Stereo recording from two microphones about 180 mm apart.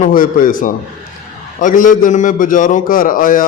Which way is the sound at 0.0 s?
50° left (ahead or behind).